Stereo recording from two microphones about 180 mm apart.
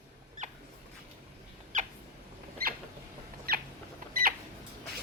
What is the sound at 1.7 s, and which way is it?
Cat, 45° right (ahead or behind).